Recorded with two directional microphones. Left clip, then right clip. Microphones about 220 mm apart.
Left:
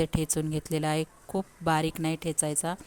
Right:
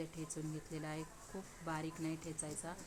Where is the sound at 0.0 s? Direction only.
45° left (ahead or behind).